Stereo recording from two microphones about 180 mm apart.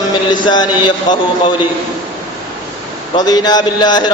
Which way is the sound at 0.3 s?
25° left (ahead or behind).